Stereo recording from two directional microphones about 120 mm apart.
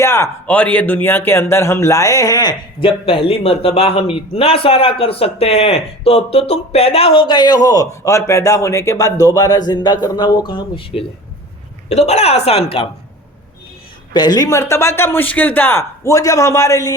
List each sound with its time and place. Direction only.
0.0 s a man's voice: 20° left (ahead or behind); by 11.0 s 45° left (ahead or behind)
11.9 s a woman's voice: 65° left (ahead or behind)
14.1 s speech: 35° left (ahead or behind)